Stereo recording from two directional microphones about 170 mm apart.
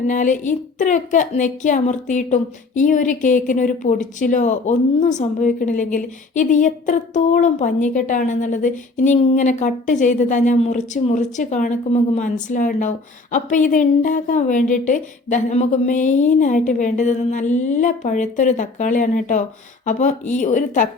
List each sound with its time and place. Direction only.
0.1 s a woman's voice: 45° left (ahead or behind)